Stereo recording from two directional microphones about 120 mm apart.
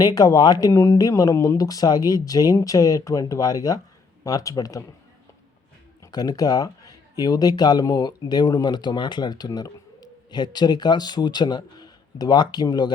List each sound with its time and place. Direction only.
0.0 s speech: 30° left (ahead or behind)
6.0 s speech: 35° left (ahead or behind)